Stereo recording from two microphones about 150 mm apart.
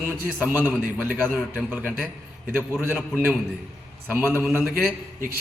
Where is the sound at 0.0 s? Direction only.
10° right (ahead or behind).